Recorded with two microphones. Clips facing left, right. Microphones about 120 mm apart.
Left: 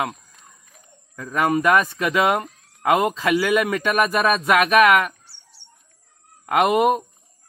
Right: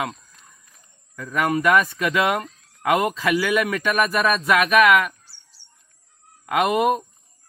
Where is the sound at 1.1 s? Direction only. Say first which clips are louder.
Left 1 dB; 30° left (ahead or behind).